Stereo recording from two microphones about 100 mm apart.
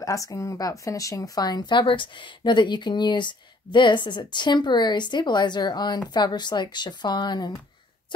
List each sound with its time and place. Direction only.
0.0 s speech: 35° left (ahead or behind)